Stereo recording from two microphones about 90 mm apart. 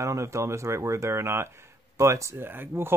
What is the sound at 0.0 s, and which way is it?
Speech, 35° right (ahead or behind).